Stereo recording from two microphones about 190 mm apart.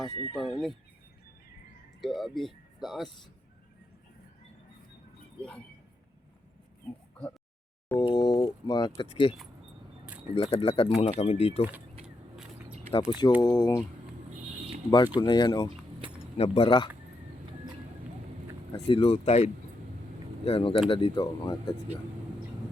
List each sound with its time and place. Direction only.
0.1 s speech: 30° left (ahead or behind)
0.3 s speech: centre (ahead or behind)
2.0 s speech: centre (ahead or behind)
5.4 s speech: 5° left (ahead or behind)
8.1 s speech: 25° left (ahead or behind)
10.3 s speech: 30° left (ahead or behind)
12.6 s a sound: 35° right (ahead or behind)
13.1 s speech: 25° left (ahead or behind)
14.8 s speech: 20° left (ahead or behind)
18.9 s speech: 30° left (ahead or behind)